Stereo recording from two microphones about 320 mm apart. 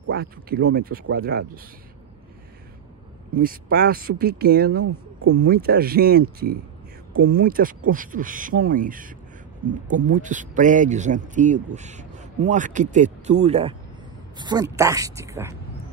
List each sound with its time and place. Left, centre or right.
0.0 s speech: right
3.7 s speech: right; by 15.5 s centre